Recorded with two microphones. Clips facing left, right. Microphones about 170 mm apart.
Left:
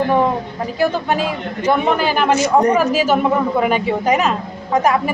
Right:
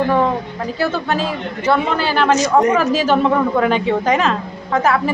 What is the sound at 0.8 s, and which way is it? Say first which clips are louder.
A woman's voice: left 2 dB; 15° left (ahead or behind).